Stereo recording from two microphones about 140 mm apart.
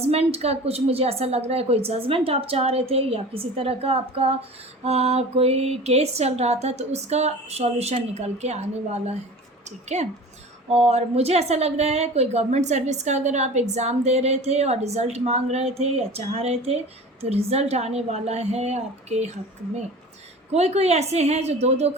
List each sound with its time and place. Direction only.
0.0 s a woman's voice: 45° right (ahead or behind)